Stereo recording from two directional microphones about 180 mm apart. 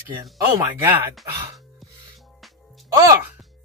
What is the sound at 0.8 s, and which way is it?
Speech, 15° right (ahead or behind).